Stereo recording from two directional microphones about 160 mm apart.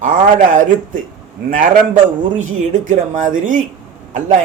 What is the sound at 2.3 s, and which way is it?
A man's voice, 50° right (ahead or behind).